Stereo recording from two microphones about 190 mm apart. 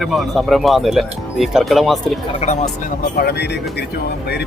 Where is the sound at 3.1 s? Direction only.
60° left (ahead or behind).